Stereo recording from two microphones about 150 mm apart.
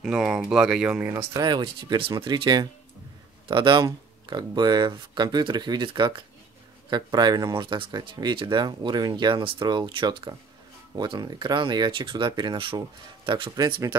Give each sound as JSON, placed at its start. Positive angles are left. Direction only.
{"t": 0.0, "sound": "speech", "side_deg": -5}
{"t": 1.4, "sound": "speech", "side_deg": -30}